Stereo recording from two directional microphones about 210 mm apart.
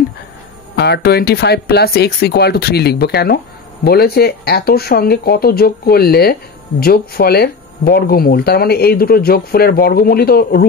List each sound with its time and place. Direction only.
0.7 s speech: 50° left (ahead or behind)